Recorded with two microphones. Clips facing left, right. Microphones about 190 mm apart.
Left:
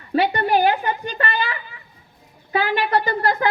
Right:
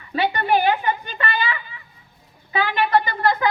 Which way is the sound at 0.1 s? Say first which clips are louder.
Left 2 dB; 40° left (ahead or behind).